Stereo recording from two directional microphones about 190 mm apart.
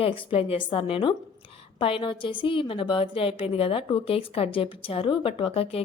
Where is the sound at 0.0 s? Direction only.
30° left (ahead or behind).